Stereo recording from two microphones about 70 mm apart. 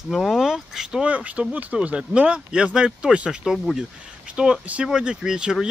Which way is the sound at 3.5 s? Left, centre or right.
Centre.